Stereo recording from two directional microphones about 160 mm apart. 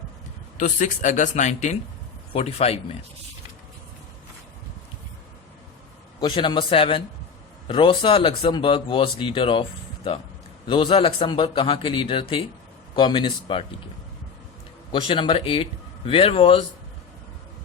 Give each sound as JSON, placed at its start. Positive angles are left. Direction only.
{"t": 0.5, "sound": "speech", "side_deg": 50}
{"t": 6.1, "sound": "a man's voice", "side_deg": 30}
{"t": 14.9, "sound": "speech", "side_deg": 30}